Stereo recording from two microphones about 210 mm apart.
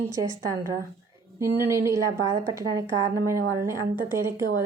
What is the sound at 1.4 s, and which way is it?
Speech, 15° right (ahead or behind).